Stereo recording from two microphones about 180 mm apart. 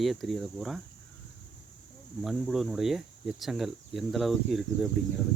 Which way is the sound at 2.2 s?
Centre (ahead or behind).